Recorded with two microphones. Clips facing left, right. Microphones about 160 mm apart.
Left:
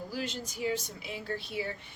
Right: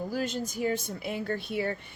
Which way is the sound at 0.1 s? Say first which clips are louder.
Right 6 dB; 50° right (ahead or behind).